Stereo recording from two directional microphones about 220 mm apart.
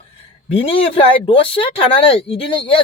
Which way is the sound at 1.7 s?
25° left (ahead or behind).